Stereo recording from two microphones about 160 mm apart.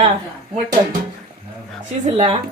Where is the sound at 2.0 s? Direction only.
40° right (ahead or behind).